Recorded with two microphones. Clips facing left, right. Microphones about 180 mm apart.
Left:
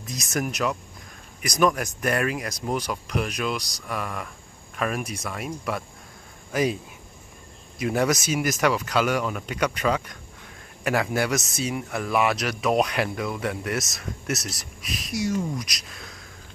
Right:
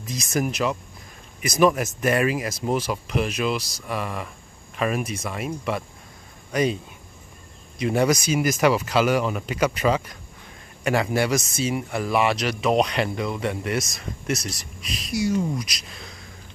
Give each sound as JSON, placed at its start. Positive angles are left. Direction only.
{"t": 0.0, "sound": "speech", "side_deg": 0}
{"t": 7.8, "sound": "speech", "side_deg": 0}